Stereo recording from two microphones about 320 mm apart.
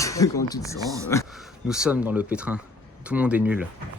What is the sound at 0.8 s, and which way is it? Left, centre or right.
Speech, centre.